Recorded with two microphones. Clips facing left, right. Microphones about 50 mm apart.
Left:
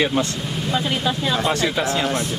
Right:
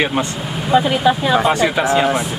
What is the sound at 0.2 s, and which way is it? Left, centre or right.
Speech, right.